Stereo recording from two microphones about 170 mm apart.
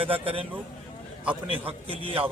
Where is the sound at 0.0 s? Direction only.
30° right (ahead or behind).